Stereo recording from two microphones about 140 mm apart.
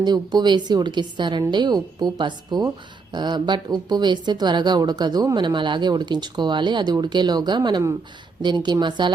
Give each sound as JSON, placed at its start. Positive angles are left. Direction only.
{"t": 0.0, "sound": "a woman's voice", "side_deg": -30}